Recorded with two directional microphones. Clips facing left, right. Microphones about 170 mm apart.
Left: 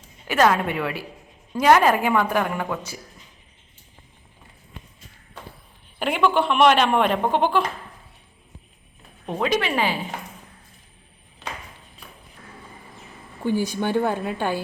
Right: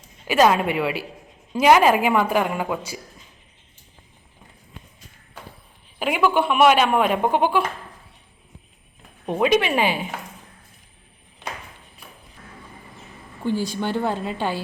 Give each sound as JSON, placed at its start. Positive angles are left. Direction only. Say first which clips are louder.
{"t": 0.3, "sound": "speech", "louder": "right 2 dB", "side_deg": -15}
{"t": 6.0, "sound": "speech", "louder": "even", "side_deg": -5}
{"t": 9.2, "sound": "speech", "louder": "right 4 dB", "side_deg": -15}
{"t": 13.4, "sound": "speech", "louder": "left 1 dB", "side_deg": 15}